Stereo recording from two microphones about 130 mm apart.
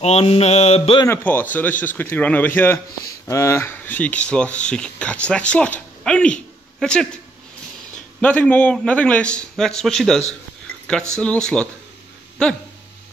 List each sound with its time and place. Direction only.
0.0 s mantra: 55° left (ahead or behind)
1.0 s speech: 15° left (ahead or behind)
8.2 s speech: 10° left (ahead or behind)